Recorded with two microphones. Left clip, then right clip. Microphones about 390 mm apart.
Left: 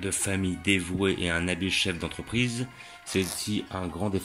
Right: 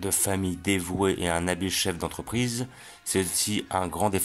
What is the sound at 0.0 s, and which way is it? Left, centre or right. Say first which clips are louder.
Speech: right 2 dB; centre.